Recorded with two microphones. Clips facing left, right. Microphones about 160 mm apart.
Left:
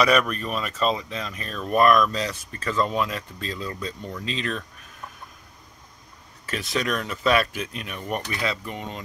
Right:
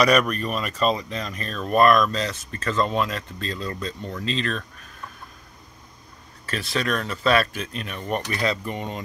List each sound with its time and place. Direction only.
0.3 s speech: 40° right (ahead or behind)
1.3 s speech: 10° left (ahead or behind)
6.4 s speech: 15° left (ahead or behind); by 9.0 s centre (ahead or behind)